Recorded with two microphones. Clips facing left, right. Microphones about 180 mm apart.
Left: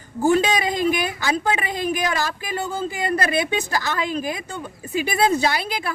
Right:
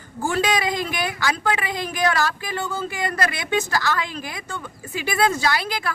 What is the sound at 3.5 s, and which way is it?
A woman's voice, 15° left (ahead or behind).